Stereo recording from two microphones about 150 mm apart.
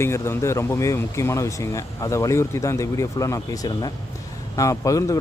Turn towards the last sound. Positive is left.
turn(degrees=20)  # may be behind; listen again after turning